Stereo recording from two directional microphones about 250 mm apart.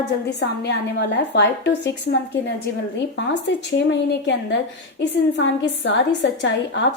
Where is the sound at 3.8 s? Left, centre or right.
Left.